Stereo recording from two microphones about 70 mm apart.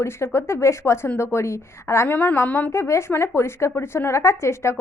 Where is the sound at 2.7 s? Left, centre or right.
Left.